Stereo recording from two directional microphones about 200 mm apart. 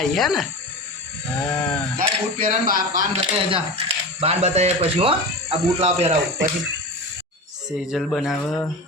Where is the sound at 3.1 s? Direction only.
30° right (ahead or behind).